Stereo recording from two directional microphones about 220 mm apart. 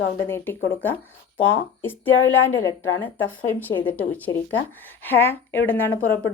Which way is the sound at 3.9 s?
5° left (ahead or behind).